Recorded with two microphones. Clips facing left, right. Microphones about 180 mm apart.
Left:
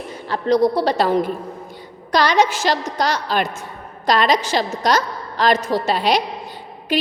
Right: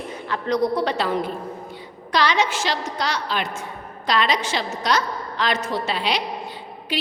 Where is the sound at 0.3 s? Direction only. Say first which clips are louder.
Left 5 dB; 35° left (ahead or behind).